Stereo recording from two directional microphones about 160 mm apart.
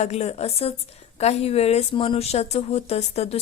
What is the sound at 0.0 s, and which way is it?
Speech, 40° left (ahead or behind).